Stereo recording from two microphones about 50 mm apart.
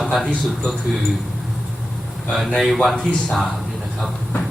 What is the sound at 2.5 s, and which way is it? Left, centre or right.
Speech, centre.